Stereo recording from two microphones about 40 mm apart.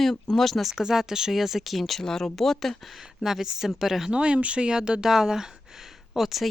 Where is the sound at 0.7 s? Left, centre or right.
Centre.